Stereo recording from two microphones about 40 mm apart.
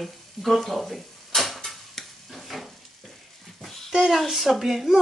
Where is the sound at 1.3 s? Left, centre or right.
Centre.